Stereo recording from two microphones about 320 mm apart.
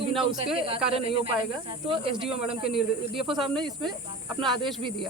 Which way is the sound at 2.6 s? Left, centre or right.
Centre.